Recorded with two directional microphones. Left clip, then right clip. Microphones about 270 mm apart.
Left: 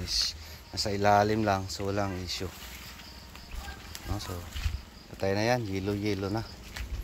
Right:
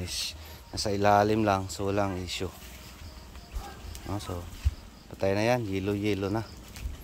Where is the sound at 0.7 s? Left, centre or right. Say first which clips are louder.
Right 1 dB; centre.